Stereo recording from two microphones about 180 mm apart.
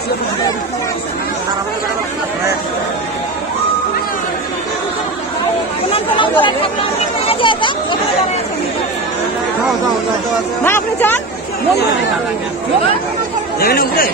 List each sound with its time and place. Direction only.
5.9 s chatter: 30° left (ahead or behind)
7.2 s speech: 25° left (ahead or behind)
10.6 s speech: 10° left (ahead or behind)
13.6 s speech: 55° left (ahead or behind)